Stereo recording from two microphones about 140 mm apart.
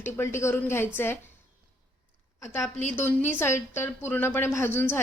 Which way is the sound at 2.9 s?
15° left (ahead or behind).